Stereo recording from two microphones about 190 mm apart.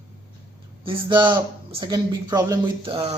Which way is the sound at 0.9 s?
25° right (ahead or behind).